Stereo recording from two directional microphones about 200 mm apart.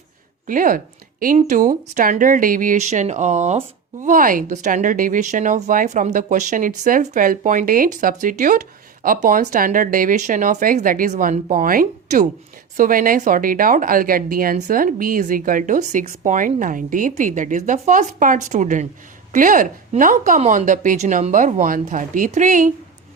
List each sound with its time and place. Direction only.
0.4 s a woman's voice: 40° right (ahead or behind)